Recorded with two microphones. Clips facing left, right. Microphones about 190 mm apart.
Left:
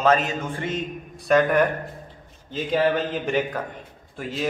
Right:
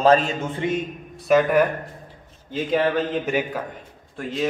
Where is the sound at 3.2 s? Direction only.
5° right (ahead or behind).